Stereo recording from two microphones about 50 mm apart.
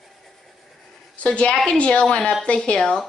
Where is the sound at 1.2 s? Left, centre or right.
Left.